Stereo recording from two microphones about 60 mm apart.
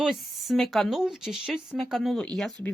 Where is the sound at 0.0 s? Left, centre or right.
Centre.